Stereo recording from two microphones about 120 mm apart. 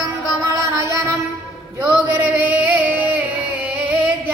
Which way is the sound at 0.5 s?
25° right (ahead or behind).